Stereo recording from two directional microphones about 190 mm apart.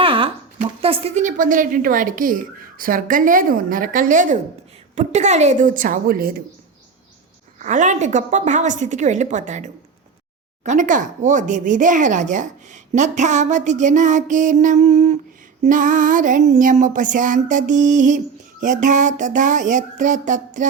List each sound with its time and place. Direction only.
0.0 s a woman's voice: 30° right (ahead or behind); by 6.3 s 50° right (ahead or behind)
7.6 s speech: 40° right (ahead or behind)
10.7 s a woman's voice: 40° right (ahead or behind)